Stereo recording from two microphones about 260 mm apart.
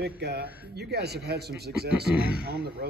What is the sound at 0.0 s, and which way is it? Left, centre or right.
A man's voice, right.